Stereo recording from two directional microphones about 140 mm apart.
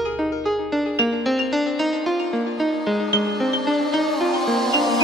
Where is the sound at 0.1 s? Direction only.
Centre (ahead or behind).